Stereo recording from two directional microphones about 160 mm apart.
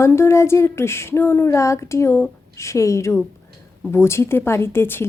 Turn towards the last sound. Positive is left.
turn(degrees=15)  # may be behind; listen again after turning